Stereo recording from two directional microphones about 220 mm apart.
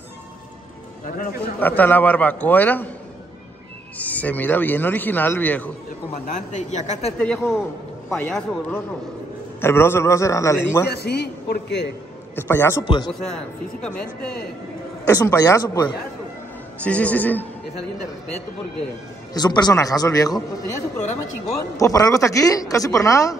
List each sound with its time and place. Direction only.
1.0 s a man's voice: 40° left (ahead or behind)
1.6 s speech: 10° left (ahead or behind)
4.0 s speech: 5° left (ahead or behind)
6.2 s speech: 35° left (ahead or behind)
7.2 s speech: 5° left (ahead or behind)
10.9 s a man's voice: 45° left (ahead or behind)
12.4 s speech: 10° left (ahead or behind)
13.1 s speech: centre (ahead or behind)
16.8 s speech: 5° left (ahead or behind)
19.3 s speech: 20° left (ahead or behind)
21.7 s speech: 15° left (ahead or behind)